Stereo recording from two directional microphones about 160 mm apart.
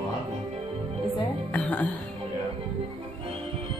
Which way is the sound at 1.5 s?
10° left (ahead or behind).